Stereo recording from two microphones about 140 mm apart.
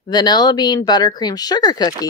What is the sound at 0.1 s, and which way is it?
Speech, 30° left (ahead or behind).